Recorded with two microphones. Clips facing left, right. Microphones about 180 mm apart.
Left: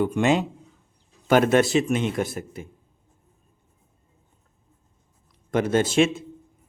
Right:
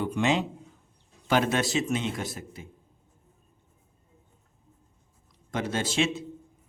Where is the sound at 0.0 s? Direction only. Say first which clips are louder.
Left 5 dB; 50° left (ahead or behind).